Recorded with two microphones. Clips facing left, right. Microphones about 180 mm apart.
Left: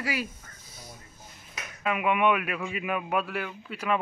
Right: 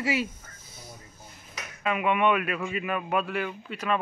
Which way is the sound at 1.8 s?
5° left (ahead or behind).